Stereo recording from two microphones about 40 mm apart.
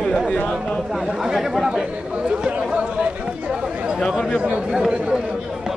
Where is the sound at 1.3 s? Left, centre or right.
Centre.